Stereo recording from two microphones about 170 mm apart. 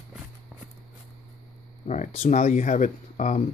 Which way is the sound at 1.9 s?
45° left (ahead or behind).